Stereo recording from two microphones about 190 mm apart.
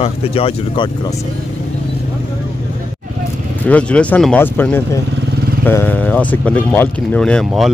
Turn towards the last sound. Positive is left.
turn(degrees=0)  # may be behind; listen again after turning